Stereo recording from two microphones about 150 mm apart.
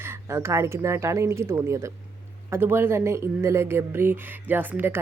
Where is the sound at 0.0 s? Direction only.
20° right (ahead or behind).